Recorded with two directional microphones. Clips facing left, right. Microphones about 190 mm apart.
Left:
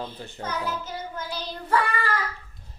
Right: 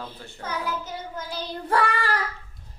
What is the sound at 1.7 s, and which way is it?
Child singing, 75° right (ahead or behind).